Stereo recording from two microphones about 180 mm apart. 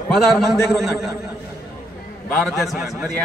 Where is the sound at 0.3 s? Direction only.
Centre (ahead or behind).